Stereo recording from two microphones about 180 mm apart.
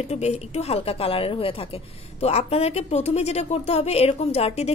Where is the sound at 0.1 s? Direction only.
40° left (ahead or behind).